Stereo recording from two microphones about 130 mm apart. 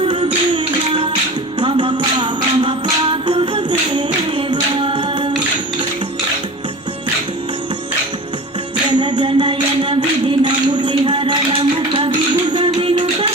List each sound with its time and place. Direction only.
0.0 s a sound: 40° right (ahead or behind)
1.5 s music: 40° right (ahead or behind)
4.8 s singing: 40° right (ahead or behind)
9.0 s music: 35° right (ahead or behind)